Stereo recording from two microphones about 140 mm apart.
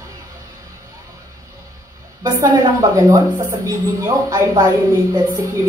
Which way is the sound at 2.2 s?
25° right (ahead or behind).